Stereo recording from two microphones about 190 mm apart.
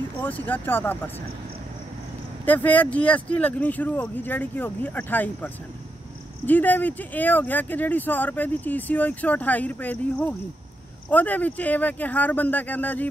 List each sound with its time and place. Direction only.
0.2 s speech: 10° left (ahead or behind)
2.4 s speech: 10° left (ahead or behind)